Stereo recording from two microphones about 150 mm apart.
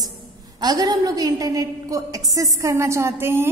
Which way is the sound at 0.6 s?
25° right (ahead or behind).